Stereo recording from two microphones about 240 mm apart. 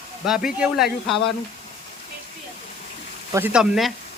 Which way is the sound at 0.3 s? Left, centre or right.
Centre.